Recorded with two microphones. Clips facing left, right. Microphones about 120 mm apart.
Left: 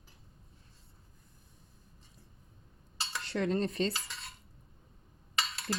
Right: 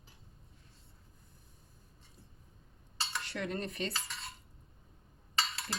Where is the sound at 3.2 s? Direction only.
30° left (ahead or behind).